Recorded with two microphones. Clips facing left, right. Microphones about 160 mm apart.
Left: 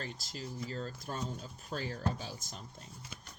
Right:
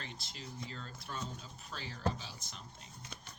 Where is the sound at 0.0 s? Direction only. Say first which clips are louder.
Left 5 dB; 45° left (ahead or behind).